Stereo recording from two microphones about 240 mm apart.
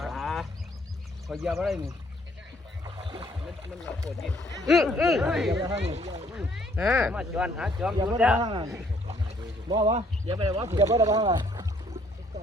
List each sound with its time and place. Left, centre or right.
0.0 s duck: centre
1.3 s speech: centre
2.8 s boat: centre
4.2 s speech: centre
5.6 s speech: right
6.3 s speech: centre
8.4 s speech: centre